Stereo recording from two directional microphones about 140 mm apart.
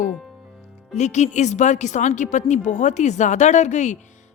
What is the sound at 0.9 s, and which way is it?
A woman's voice, 55° left (ahead or behind).